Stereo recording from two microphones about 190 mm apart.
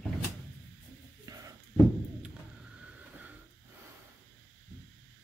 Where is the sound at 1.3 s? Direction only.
20° right (ahead or behind).